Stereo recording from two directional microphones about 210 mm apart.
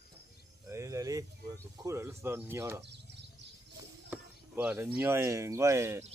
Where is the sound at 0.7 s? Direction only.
15° right (ahead or behind).